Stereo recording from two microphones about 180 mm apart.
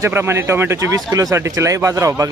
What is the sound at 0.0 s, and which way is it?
A man's voice, 15° right (ahead or behind).